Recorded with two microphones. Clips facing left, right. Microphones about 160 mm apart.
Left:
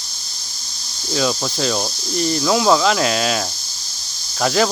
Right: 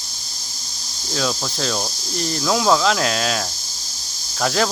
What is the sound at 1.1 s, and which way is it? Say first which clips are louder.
Speech: left 3 dB; centre (ahead or behind).